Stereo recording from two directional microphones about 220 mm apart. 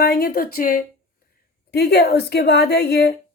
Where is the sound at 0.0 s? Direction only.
45° left (ahead or behind).